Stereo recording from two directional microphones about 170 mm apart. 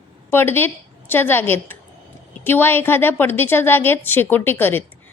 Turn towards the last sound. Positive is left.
turn(degrees=10)  # may be behind; listen again after turning